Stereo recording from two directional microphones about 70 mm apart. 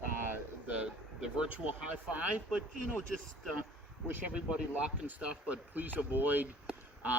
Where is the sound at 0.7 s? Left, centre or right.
Centre.